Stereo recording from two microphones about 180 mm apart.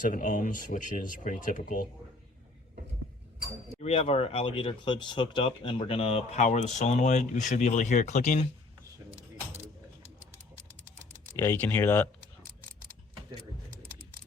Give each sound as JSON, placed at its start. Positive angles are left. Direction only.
{"t": 0.1, "sound": "speech", "side_deg": 50}
{"t": 3.8, "sound": "speech", "side_deg": 35}
{"t": 11.3, "sound": "speech", "side_deg": 15}